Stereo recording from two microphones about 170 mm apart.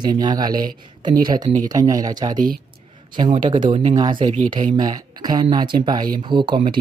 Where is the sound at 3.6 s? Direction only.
30° right (ahead or behind).